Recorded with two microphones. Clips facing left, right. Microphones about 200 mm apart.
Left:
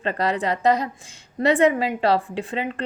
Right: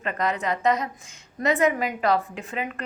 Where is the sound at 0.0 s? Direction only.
30° left (ahead or behind).